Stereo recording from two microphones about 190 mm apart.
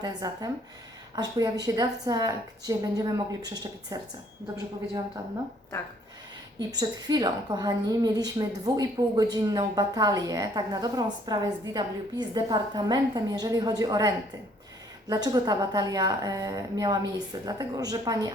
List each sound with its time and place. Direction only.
0.0 s a woman's voice: 20° right (ahead or behind)
6.6 s a woman's voice: 20° right (ahead or behind)